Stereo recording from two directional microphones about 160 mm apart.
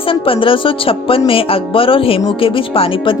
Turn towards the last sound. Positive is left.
turn(degrees=35)  # may be behind; listen again after turning